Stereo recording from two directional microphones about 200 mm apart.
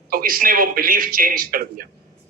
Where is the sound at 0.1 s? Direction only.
45° right (ahead or behind).